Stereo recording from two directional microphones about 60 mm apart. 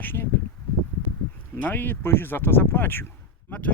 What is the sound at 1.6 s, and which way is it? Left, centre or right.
Speech, left.